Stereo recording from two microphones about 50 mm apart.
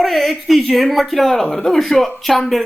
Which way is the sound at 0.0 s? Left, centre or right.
Centre.